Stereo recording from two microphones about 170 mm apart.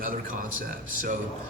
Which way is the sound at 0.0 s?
55° right (ahead or behind).